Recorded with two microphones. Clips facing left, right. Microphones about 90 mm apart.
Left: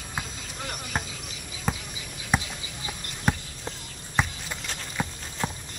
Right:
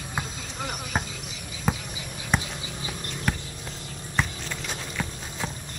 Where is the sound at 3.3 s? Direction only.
25° left (ahead or behind).